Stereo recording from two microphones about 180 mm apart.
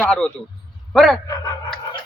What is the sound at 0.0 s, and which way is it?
Speech, 5° left (ahead or behind).